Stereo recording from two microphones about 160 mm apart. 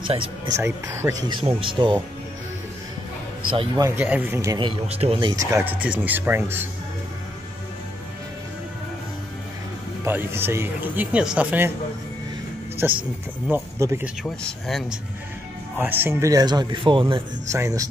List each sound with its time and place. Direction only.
0.5 s speech: 20° right (ahead or behind)
1.3 s speech: 35° right (ahead or behind)
3.5 s speech: 25° right (ahead or behind)
3.9 s speech: 10° right (ahead or behind)
4.6 s speech: 40° right (ahead or behind)
5.3 s speech: 20° right (ahead or behind)
10.0 s speech: 15° right (ahead or behind)
12.8 s speech: 15° right (ahead or behind)
14.2 s speech: 5° left (ahead or behind)
15.8 s speech: 15° right (ahead or behind); by 17.0 s 30° right (ahead or behind)
17.5 s speech: 20° right (ahead or behind)